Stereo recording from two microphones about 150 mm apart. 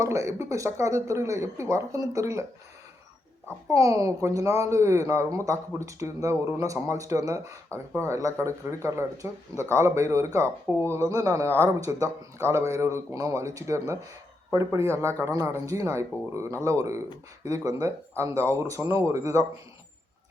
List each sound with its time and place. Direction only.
0.0 s speech: 20° right (ahead or behind)
3.7 s speech: 20° right (ahead or behind)